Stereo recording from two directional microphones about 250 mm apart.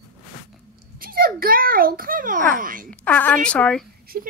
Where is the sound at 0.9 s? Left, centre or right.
Right.